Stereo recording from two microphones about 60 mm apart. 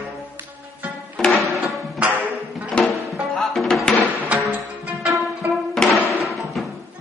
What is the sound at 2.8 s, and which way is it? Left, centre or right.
Music, centre.